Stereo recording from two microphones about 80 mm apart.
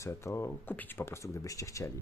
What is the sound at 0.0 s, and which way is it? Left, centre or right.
Speech, left.